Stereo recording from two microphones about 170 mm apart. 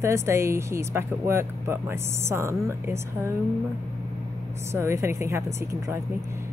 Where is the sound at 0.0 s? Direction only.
15° right (ahead or behind).